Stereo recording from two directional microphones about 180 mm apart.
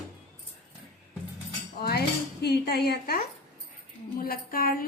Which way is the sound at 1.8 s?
60° left (ahead or behind).